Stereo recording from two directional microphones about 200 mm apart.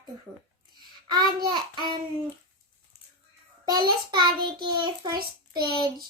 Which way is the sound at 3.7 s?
20° right (ahead or behind).